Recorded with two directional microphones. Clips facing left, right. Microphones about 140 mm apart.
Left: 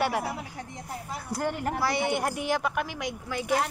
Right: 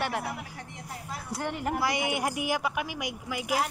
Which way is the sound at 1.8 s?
15° right (ahead or behind).